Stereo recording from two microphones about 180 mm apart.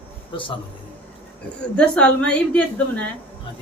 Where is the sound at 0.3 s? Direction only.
30° left (ahead or behind).